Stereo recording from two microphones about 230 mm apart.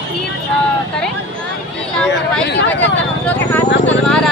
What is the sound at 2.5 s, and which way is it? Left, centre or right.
Speech, left.